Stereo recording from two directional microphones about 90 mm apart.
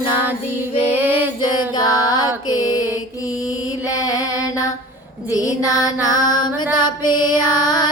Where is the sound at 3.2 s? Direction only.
40° left (ahead or behind).